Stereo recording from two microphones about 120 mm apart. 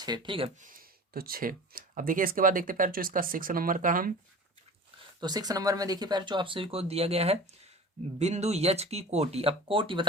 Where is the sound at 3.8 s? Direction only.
90° right.